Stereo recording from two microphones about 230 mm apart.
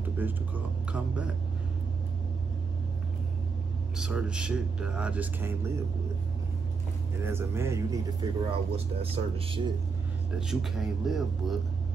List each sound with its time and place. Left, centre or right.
0.9 s speech: centre
3.9 s speech: centre
7.2 s speech: centre
10.5 s speech: centre